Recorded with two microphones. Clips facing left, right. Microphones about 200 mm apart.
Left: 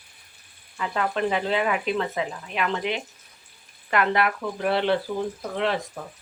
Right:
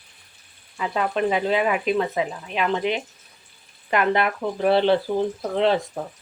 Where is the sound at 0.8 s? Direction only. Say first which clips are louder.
Right 2 dB; 15° right (ahead or behind).